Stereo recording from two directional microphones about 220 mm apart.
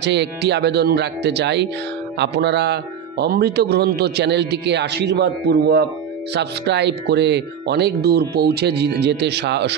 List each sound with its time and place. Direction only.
0.0 s speech: 50° right (ahead or behind)